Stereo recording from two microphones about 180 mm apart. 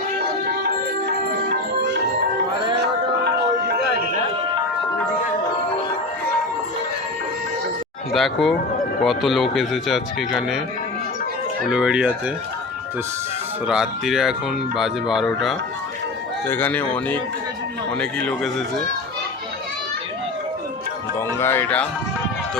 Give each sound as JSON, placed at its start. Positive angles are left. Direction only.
{"t": 3.7, "sound": "music", "side_deg": -55}
{"t": 8.1, "sound": "speech", "side_deg": 0}
{"t": 11.7, "sound": "speech", "side_deg": -5}
{"t": 13.7, "sound": "speech", "side_deg": 0}
{"t": 16.5, "sound": "speech", "side_deg": 10}
{"t": 21.2, "sound": "speech", "side_deg": 15}